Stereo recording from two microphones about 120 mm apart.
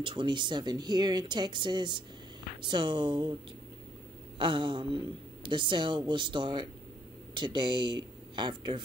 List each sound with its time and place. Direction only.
0.0 s speech: 40° right (ahead or behind)
4.4 s speech: 40° right (ahead or behind)